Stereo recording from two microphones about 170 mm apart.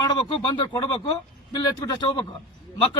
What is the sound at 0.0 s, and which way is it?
A man's voice, 30° left (ahead or behind).